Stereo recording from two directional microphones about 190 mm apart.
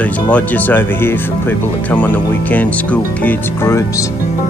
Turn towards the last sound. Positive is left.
turn(degrees=10)  # may be behind; listen again after turning